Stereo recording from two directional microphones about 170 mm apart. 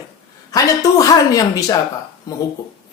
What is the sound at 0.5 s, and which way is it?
Speech, 20° left (ahead or behind).